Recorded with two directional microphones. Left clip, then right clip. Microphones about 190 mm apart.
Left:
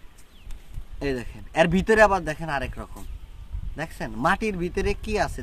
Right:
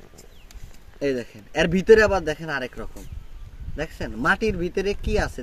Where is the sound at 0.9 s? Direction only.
20° left (ahead or behind).